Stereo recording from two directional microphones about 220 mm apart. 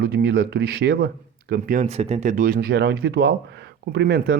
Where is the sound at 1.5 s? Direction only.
35° right (ahead or behind).